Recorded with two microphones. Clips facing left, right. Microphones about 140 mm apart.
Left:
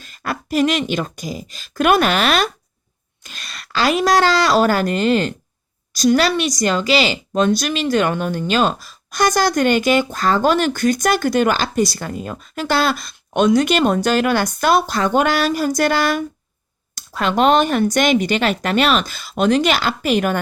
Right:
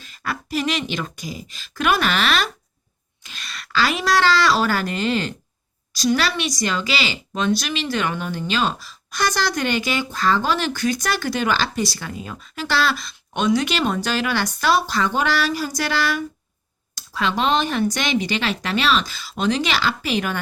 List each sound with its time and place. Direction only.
0.0 s speech: 45° left (ahead or behind)